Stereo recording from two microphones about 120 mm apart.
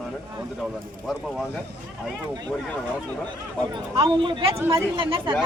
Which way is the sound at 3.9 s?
45° right (ahead or behind).